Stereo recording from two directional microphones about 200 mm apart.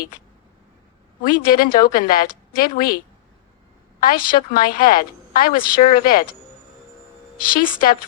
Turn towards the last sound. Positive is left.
turn(degrees=45)  # may be behind; listen again after turning